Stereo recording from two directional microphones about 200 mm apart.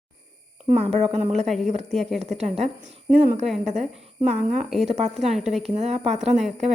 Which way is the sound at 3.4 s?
Centre (ahead or behind).